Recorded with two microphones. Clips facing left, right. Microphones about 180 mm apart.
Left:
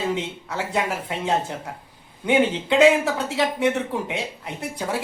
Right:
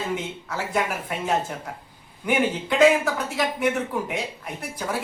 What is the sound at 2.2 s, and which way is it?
Speech, 25° left (ahead or behind).